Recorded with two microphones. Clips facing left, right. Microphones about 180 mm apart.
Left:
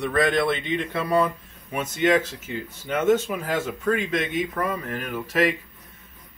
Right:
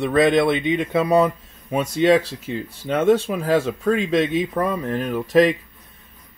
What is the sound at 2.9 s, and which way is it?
Speech, 35° right (ahead or behind).